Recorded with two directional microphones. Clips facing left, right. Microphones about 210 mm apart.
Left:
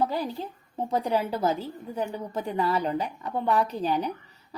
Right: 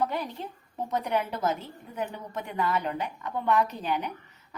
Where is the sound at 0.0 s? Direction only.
30° left (ahead or behind).